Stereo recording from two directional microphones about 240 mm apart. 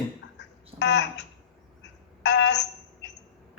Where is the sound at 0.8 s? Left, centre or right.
Left.